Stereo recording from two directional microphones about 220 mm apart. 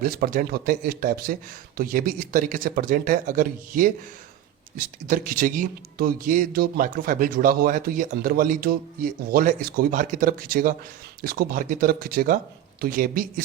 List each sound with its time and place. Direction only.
0.0 s speech: 40° right (ahead or behind)